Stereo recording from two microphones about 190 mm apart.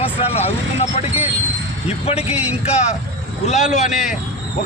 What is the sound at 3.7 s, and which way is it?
Speech, 40° left (ahead or behind).